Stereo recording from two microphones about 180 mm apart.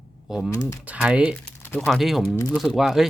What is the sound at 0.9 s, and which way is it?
Speech, 5° right (ahead or behind).